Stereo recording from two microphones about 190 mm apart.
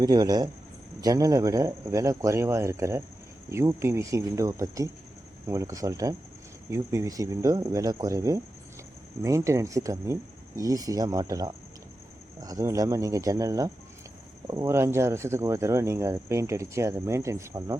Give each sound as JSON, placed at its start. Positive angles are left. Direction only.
{"t": 0.0, "sound": "speech", "side_deg": -20}